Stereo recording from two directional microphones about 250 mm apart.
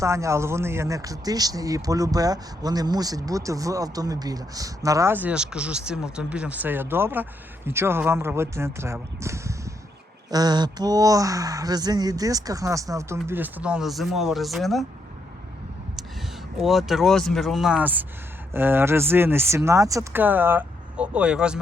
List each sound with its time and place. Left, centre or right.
0.0 s speech: centre
16.6 s speech: centre